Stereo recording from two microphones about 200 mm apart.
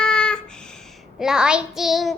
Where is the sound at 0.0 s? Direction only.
5° left (ahead or behind).